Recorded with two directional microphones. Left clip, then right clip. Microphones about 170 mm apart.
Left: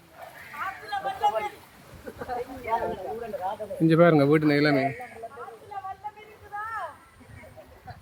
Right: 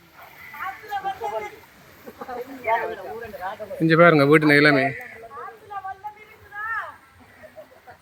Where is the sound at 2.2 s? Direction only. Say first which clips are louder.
Even; 40° right (ahead or behind).